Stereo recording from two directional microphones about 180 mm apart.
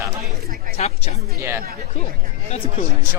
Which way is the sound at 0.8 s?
35° left (ahead or behind).